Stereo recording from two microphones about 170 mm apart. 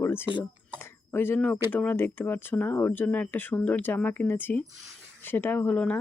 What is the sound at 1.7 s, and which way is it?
Speech, 10° left (ahead or behind).